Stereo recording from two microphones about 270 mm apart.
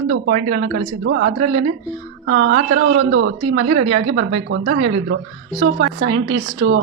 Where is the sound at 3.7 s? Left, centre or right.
Right.